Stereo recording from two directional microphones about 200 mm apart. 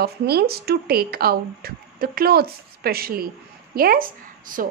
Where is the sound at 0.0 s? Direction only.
50° right (ahead or behind).